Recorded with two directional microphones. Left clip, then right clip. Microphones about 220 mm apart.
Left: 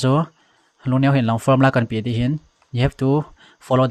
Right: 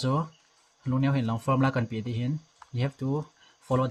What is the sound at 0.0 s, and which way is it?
Speech, 35° left (ahead or behind).